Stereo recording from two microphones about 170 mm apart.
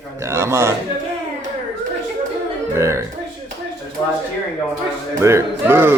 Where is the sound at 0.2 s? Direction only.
15° right (ahead or behind).